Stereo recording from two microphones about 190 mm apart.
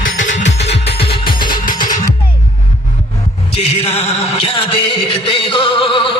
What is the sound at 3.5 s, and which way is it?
Music, 30° left (ahead or behind).